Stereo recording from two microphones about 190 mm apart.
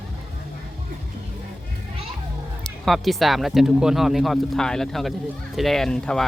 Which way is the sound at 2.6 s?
Centre (ahead or behind).